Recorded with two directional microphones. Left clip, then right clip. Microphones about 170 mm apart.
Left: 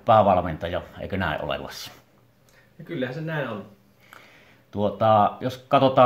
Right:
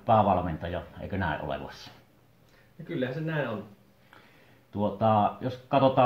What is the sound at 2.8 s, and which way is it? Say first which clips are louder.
Speech: left 2 dB; centre (ahead or behind).